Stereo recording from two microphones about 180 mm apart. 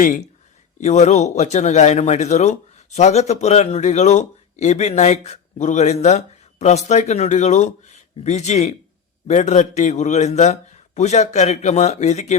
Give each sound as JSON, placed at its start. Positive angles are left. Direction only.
{"t": 0.0, "sound": "speech", "side_deg": 45}